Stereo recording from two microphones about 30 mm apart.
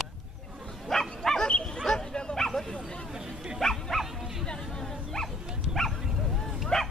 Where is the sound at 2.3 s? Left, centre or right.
Centre.